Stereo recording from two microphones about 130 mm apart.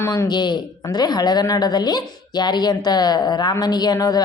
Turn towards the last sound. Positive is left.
turn(degrees=30)  # may be behind; listen again after turning